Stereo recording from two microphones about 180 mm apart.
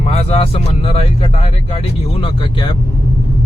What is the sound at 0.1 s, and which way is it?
Speech, 35° left (ahead or behind).